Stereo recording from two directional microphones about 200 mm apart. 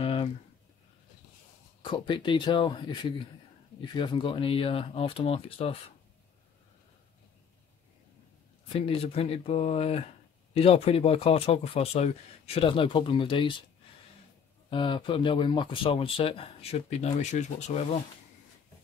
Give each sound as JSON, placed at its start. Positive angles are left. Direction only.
{"t": 0.0, "sound": "a sound", "side_deg": 30}
{"t": 1.8, "sound": "speech", "side_deg": 25}
{"t": 8.6, "sound": "speech", "side_deg": 30}
{"t": 14.7, "sound": "speech", "side_deg": 25}